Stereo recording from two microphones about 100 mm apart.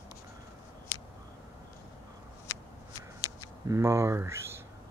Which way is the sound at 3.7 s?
30° right (ahead or behind).